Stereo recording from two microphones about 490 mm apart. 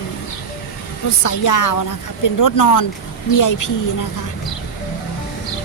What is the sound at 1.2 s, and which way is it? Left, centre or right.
A woman's voice, left.